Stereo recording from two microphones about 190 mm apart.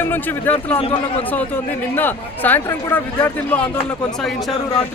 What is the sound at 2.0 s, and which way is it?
A man's voice, 10° left (ahead or behind).